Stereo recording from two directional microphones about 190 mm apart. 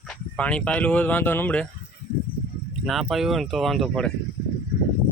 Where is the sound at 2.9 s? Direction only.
Centre (ahead or behind).